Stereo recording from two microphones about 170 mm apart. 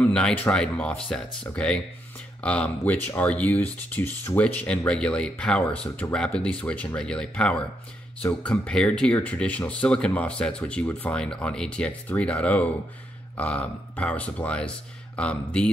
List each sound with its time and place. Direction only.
0.0 s speech: 10° left (ahead or behind)